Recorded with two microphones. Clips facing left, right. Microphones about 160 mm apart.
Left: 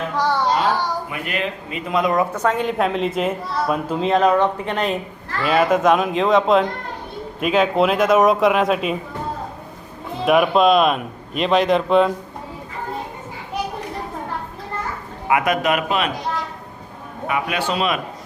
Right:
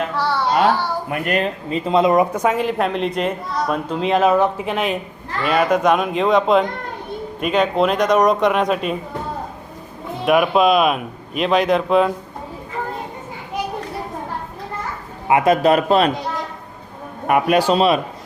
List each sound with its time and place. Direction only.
0.2 s a sound: 15° left (ahead or behind)
1.1 s speech: 45° right (ahead or behind)
1.9 s a woman's voice: 25° right (ahead or behind)
2.3 s speech: 10° right (ahead or behind)
10.2 s speech: centre (ahead or behind)
15.3 s a man's voice: 30° right (ahead or behind)
17.2 s speech: 50° right (ahead or behind)
17.6 s a man's voice: 35° right (ahead or behind)